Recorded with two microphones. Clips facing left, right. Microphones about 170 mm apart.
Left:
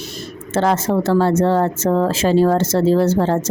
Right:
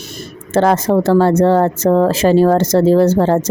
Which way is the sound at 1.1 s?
55° right (ahead or behind).